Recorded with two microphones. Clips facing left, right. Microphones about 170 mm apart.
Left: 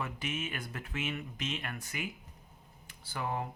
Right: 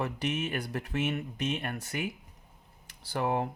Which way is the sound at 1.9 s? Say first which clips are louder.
Right 5 dB; 65° right (ahead or behind).